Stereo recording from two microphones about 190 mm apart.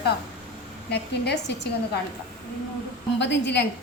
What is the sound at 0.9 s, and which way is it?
Speech, 60° left (ahead or behind).